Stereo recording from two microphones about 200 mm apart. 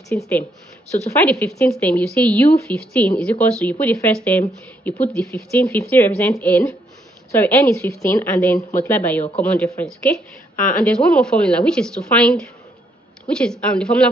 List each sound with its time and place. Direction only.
0.1 s a woman's voice: 5° left (ahead or behind)
10.5 s a sound: 40° left (ahead or behind)
10.9 s a woman's voice: 5° left (ahead or behind)